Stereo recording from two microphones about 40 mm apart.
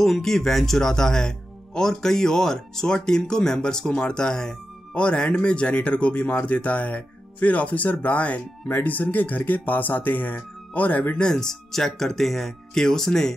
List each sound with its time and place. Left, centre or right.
0.0 s speech: centre; by 11.1 s left
11.1 s speech: centre